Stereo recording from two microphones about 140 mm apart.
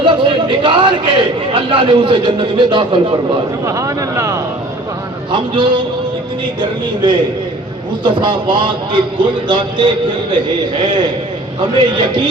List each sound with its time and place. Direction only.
0.0 s a man's voice: 35° right (ahead or behind)
3.7 s speech: 20° right (ahead or behind)
5.3 s a man's voice: 35° right (ahead or behind)